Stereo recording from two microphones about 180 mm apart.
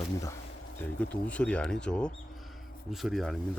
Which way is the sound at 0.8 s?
5° left (ahead or behind).